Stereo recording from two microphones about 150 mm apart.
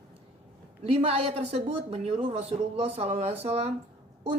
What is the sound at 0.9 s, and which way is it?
A woman's voice, 40° right (ahead or behind).